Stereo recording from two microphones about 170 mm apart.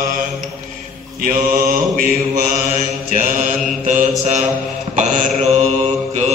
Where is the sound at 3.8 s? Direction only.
45° right (ahead or behind).